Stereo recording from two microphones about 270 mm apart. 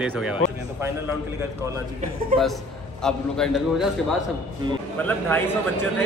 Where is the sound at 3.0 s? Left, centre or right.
Centre.